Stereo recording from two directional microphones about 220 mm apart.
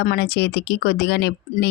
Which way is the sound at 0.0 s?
45° left (ahead or behind).